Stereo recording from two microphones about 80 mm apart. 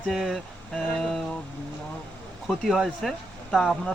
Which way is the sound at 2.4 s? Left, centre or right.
Centre.